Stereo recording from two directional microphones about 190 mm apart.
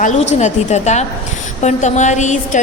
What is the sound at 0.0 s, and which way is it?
A woman's voice, 35° left (ahead or behind).